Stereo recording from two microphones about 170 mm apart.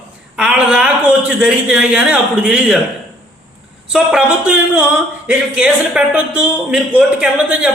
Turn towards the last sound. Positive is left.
turn(degrees=-5)  # may be behind; listen again after turning